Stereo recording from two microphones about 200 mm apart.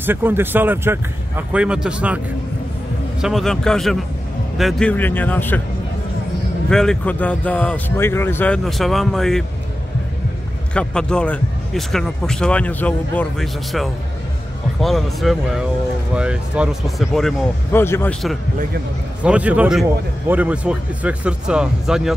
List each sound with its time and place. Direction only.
0.0 s a man's voice: 10° right (ahead or behind)
3.2 s a man's voice: centre (ahead or behind)
6.7 s speech: 5° left (ahead or behind)
10.7 s speech: 5° left (ahead or behind)
17.7 s a man's voice: 10° left (ahead or behind)
19.2 s a man's voice: 5° right (ahead or behind)